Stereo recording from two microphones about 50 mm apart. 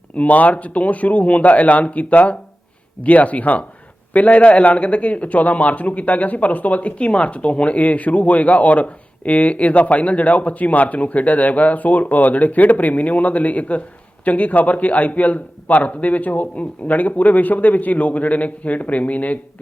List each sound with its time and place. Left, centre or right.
0.2 s a man's voice: left